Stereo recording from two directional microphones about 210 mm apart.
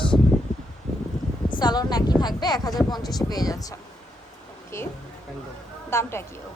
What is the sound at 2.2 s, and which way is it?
Speech, 20° left (ahead or behind).